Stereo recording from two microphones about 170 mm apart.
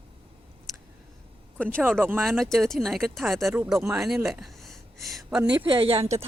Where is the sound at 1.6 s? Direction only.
5° left (ahead or behind).